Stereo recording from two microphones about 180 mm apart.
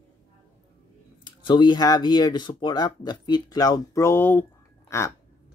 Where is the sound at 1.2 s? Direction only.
25° left (ahead or behind).